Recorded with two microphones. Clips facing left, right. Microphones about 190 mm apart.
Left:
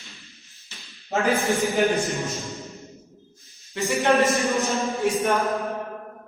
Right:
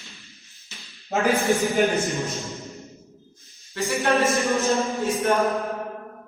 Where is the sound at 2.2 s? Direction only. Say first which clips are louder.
Right 1 dB; centre (ahead or behind).